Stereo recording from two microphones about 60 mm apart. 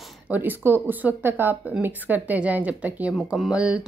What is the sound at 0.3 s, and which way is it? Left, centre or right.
A woman's voice, right.